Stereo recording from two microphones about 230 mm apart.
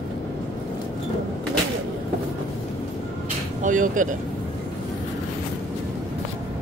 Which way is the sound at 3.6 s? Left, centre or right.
Right.